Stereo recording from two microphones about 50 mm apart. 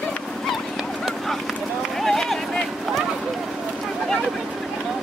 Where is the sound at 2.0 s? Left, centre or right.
Centre.